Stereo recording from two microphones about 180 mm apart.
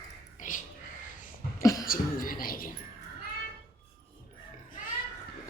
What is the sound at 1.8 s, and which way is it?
Speech, 50° left (ahead or behind).